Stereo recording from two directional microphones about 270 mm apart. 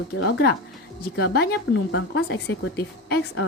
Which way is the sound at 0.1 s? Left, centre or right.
Left.